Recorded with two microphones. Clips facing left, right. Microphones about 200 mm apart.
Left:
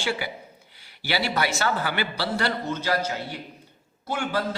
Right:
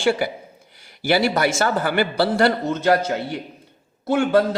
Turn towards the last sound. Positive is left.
turn(degrees=-55)  # may be behind; listen again after turning